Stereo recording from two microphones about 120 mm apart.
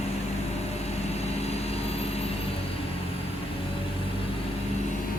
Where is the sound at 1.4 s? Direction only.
60° left (ahead or behind).